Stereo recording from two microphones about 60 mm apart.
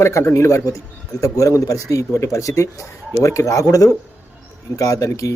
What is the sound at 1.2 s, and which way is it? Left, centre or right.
Speech, left.